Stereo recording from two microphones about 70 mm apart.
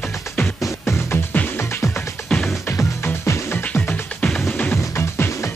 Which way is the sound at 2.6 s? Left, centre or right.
Left.